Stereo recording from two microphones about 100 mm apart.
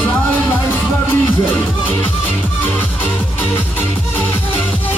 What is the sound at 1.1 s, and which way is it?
Music, 20° left (ahead or behind).